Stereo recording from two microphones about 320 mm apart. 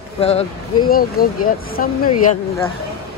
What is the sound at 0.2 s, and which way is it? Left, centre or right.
Speech, centre.